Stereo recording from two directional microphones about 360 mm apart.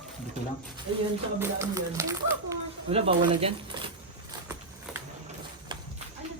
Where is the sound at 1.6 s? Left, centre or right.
Centre.